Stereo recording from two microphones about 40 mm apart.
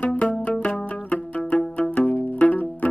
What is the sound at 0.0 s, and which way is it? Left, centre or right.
Music, left.